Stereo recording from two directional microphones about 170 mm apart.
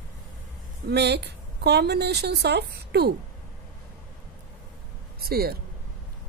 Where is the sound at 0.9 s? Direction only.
75° right (ahead or behind).